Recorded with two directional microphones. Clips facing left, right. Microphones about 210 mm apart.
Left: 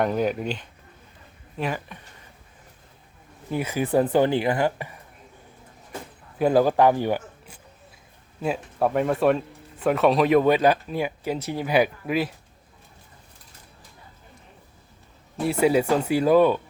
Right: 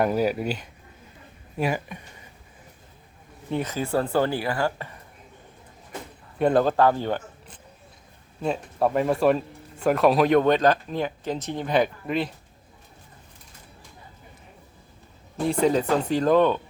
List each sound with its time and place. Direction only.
0.0 s speech: 5° right (ahead or behind)
3.5 s speech: 10° left (ahead or behind)
6.4 s speech: 5° left (ahead or behind)
15.4 s speech: 10° left (ahead or behind)